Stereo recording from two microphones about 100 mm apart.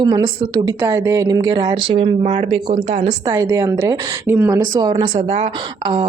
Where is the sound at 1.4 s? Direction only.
45° right (ahead or behind); by 3.0 s 85° right.